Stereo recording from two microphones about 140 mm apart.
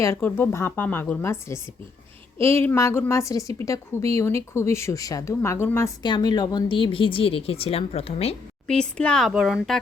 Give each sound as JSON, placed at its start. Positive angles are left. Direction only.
{"t": 0.0, "sound": "a woman's voice", "side_deg": 20}
{"t": 6.0, "sound": "a woman's voice", "side_deg": 30}
{"t": 8.6, "sound": "speech", "side_deg": 5}